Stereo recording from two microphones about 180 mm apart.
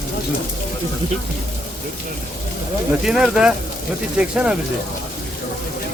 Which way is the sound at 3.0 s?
5° right (ahead or behind).